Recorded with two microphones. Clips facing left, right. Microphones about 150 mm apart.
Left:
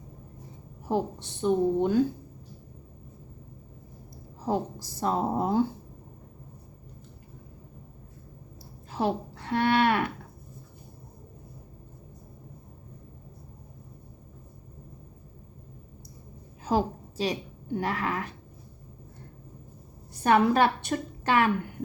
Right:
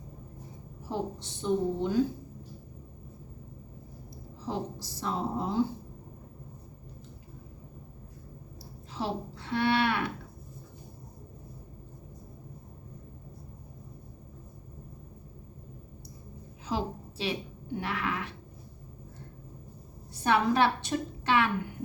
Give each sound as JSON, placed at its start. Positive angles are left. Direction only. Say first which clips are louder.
{"t": 0.9, "sound": "speech", "louder": "left 6 dB", "side_deg": 55}
{"t": 4.4, "sound": "a woman's voice", "louder": "left 6 dB", "side_deg": 50}
{"t": 8.9, "sound": "speech", "louder": "left 6 dB", "side_deg": 55}
{"t": 16.6, "sound": "a sound", "louder": "left 6 dB", "side_deg": 45}
{"t": 17.7, "sound": "speech", "louder": "left 4 dB", "side_deg": 40}
{"t": 20.2, "sound": "a woman's voice", "louder": "left 3 dB", "side_deg": 50}